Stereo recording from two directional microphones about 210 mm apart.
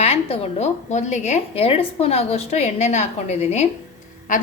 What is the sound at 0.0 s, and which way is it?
A woman's voice, 30° left (ahead or behind).